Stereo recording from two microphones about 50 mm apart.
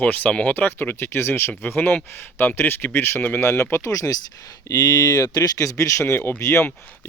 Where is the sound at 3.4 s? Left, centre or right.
Left.